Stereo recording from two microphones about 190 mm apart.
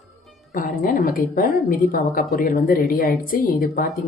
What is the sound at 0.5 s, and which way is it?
Speech, 45° left (ahead or behind).